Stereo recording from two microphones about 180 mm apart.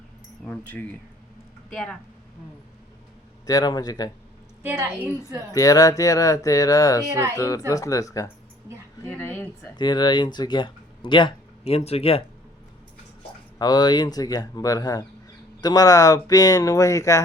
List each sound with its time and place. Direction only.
0.4 s speech: 5° left (ahead or behind)
3.4 s speech: 20° left (ahead or behind)
4.6 s a woman's voice: 10° right (ahead or behind)
5.5 s speech: 20° left (ahead or behind)
9.7 s speech: 25° left (ahead or behind)
13.6 s speech: 25° left (ahead or behind)